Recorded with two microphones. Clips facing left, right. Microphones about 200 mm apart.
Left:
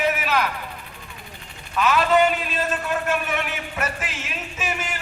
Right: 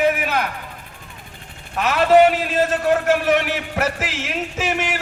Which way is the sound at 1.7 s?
65° right (ahead or behind).